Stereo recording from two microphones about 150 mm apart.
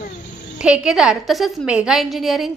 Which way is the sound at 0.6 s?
5° right (ahead or behind).